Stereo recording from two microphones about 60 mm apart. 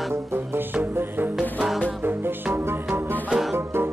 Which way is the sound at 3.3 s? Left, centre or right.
Centre.